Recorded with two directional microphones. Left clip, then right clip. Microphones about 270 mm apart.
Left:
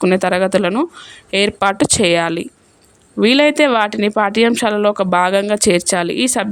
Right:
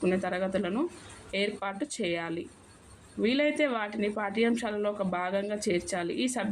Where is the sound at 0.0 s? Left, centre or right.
Left.